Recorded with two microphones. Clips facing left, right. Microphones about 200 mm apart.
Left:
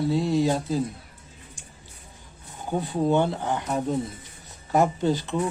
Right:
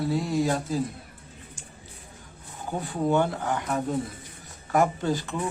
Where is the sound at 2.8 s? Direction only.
20° left (ahead or behind).